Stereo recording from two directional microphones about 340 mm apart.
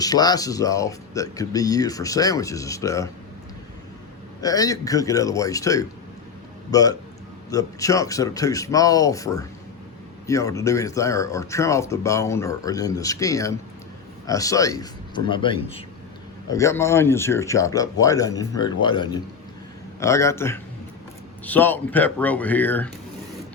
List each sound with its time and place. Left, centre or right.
0.0 s speech: centre
4.4 s a man's voice: centre